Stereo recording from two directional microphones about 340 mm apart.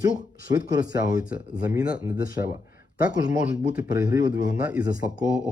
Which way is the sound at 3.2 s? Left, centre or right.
Left.